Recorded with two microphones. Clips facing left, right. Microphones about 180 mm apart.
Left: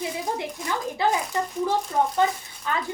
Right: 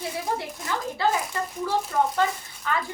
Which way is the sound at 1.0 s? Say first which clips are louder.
Left 1 dB; 20° left (ahead or behind).